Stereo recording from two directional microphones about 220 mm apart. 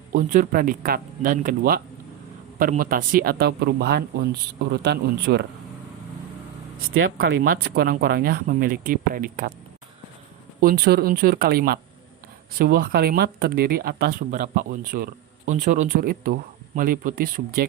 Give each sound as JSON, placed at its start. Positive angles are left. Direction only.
{"t": 0.1, "sound": "speech", "side_deg": -40}
{"t": 7.0, "sound": "speech", "side_deg": -45}
{"t": 10.6, "sound": "speech", "side_deg": -45}